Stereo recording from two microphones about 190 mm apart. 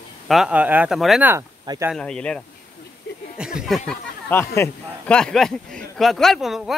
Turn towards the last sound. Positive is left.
turn(degrees=0)  # may be behind; listen again after turning